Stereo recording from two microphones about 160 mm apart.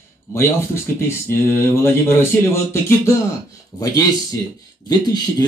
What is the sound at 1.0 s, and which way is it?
Speech, 15° left (ahead or behind).